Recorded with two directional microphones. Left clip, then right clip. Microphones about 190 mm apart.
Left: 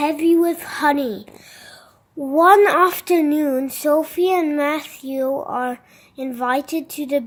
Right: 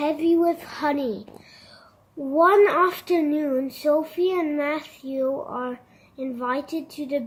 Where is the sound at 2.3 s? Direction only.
50° left (ahead or behind).